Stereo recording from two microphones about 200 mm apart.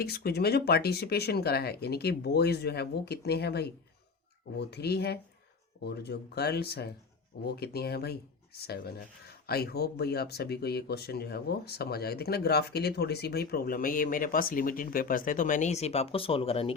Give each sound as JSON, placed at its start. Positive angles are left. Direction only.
{"t": 0.0, "sound": "speech", "side_deg": 50}